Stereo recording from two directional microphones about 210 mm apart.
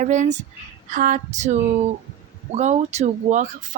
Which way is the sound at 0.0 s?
35° right (ahead or behind).